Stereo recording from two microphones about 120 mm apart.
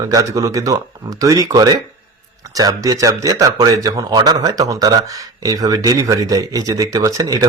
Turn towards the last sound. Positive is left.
turn(degrees=-30)  # may be behind; listen again after turning